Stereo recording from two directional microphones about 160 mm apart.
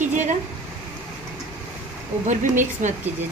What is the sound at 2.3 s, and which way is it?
Speech, 50° right (ahead or behind).